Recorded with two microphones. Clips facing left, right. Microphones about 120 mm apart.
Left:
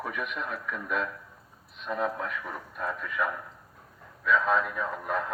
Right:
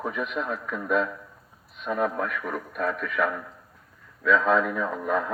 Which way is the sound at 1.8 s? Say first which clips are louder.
Right 4 dB; 55° right (ahead or behind).